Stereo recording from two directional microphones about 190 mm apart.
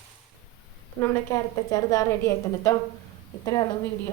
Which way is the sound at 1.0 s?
20° left (ahead or behind).